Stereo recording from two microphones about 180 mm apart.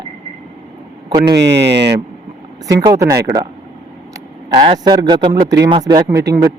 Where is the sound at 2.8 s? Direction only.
20° right (ahead or behind).